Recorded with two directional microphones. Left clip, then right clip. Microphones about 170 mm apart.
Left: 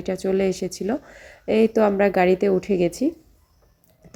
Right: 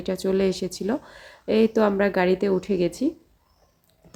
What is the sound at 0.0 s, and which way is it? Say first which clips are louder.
Speech: left 1 dB; centre (ahead or behind).